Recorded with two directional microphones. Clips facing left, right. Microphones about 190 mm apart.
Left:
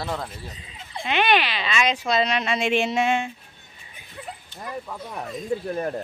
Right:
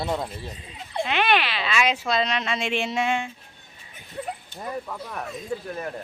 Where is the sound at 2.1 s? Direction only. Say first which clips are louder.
Left 2 dB; 10° left (ahead or behind).